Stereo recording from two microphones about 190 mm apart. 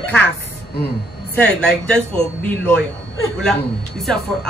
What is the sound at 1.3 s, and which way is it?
Speech, 5° left (ahead or behind).